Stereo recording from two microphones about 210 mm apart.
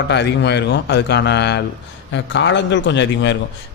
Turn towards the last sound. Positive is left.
turn(degrees=60)  # may be behind; listen again after turning